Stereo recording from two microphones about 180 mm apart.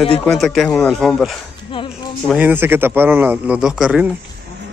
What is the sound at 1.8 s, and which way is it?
Music, 30° left (ahead or behind).